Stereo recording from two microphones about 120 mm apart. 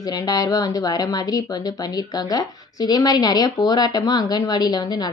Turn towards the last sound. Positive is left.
turn(degrees=35)  # may be behind; listen again after turning